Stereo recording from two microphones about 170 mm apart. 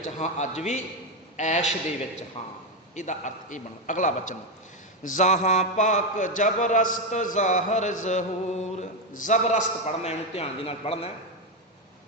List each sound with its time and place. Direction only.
0.2 s a man's voice: 40° left (ahead or behind)